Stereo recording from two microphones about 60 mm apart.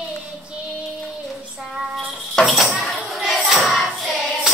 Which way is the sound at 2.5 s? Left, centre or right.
Centre.